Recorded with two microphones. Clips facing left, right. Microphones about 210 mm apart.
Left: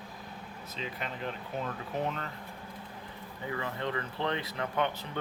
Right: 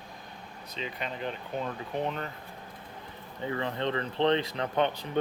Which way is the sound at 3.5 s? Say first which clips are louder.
Right 4 dB; 25° right (ahead or behind).